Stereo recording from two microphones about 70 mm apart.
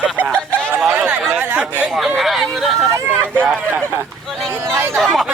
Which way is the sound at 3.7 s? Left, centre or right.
Right.